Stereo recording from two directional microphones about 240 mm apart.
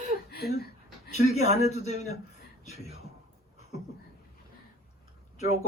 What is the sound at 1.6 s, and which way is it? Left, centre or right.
Speech, left.